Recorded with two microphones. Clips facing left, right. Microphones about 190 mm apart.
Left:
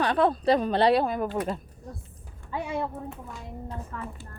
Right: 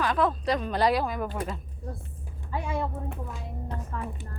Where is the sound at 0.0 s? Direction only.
30° left (ahead or behind).